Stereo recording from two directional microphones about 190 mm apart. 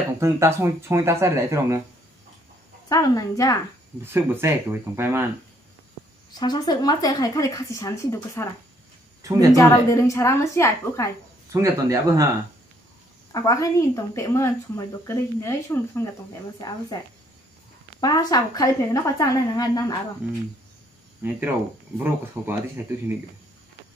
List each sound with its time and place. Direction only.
0.2 s speech: 15° right (ahead or behind)
2.9 s speech: 15° left (ahead or behind)
4.0 s speech: 10° right (ahead or behind)
6.3 s speech: 20° left (ahead or behind)
9.2 s a woman's voice: 20° right (ahead or behind)
9.6 s speech: 15° left (ahead or behind)
11.5 s speech: 15° right (ahead or behind)
13.3 s speech: 20° left (ahead or behind)
18.0 s speech: 20° left (ahead or behind)
21.2 s speech: 10° right (ahead or behind)